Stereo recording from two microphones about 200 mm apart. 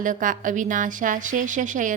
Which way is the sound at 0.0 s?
40° right (ahead or behind).